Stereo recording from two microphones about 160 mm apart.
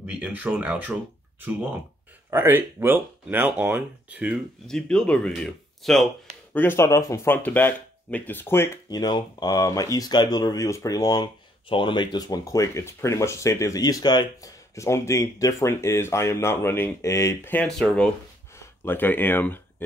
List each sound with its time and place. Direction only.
0.0 s speech: 10° right (ahead or behind)
2.3 s speech: 15° right (ahead or behind)
4.6 s speech: 5° left (ahead or behind)
6.5 s speech: 15° left (ahead or behind)